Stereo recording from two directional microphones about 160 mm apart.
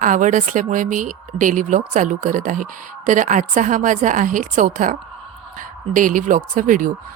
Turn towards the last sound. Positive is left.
turn(degrees=-55)  # may be behind; listen again after turning